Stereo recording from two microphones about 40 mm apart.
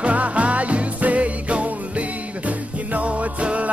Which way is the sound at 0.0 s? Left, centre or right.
Right.